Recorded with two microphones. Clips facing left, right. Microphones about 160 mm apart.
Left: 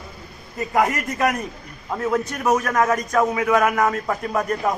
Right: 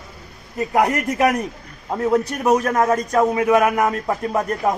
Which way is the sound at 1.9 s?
20° right (ahead or behind).